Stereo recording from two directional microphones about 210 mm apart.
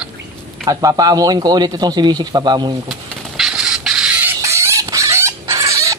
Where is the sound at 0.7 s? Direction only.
15° right (ahead or behind).